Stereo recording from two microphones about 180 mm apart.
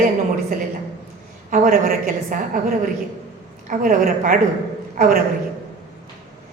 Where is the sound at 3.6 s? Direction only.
50° right (ahead or behind).